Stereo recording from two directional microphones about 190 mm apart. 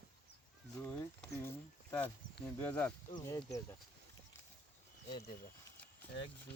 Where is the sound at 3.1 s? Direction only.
20° left (ahead or behind).